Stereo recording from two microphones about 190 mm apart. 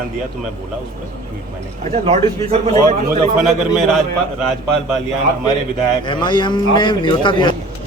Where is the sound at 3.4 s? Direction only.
Centre (ahead or behind).